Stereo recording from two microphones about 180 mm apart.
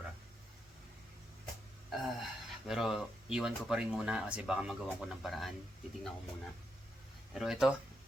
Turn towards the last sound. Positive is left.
turn(degrees=0)  # may be behind; listen again after turning